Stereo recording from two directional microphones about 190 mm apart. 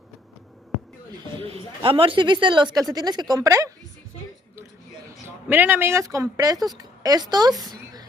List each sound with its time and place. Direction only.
1.3 s speech: 30° right (ahead or behind)
5.5 s speech: 10° right (ahead or behind)
7.6 s a sound: 20° right (ahead or behind)